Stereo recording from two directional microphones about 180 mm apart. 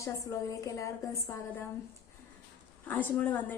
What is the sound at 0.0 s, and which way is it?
Speech, 20° left (ahead or behind).